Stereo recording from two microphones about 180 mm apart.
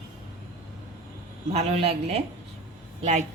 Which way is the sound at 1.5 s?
35° right (ahead or behind).